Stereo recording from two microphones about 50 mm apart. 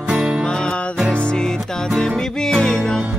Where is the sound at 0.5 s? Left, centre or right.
Centre.